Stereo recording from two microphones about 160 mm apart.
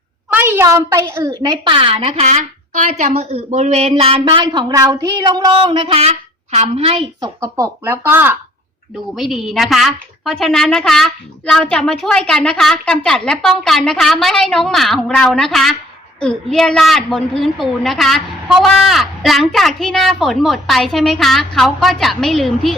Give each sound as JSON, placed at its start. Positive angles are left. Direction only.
{"t": 0.3, "sound": "a woman's voice", "side_deg": -10}
{"t": 7.5, "sound": "speech", "side_deg": -15}
{"t": 9.1, "sound": "a woman's voice", "side_deg": 0}